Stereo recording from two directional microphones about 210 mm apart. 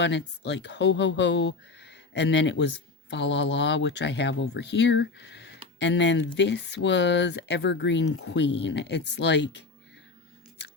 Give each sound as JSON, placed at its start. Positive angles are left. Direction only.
{"t": 0.0, "sound": "speech", "side_deg": 55}